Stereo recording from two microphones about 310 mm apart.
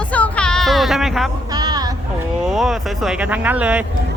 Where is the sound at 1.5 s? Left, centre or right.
Centre.